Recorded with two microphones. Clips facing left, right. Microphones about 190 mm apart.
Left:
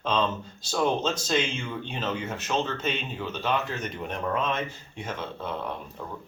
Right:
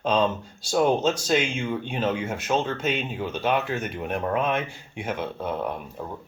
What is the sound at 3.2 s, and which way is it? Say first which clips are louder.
Speech: right 3 dB; 55° right (ahead or behind).